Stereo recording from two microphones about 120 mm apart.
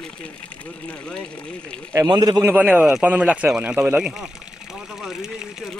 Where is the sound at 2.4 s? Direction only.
15° right (ahead or behind).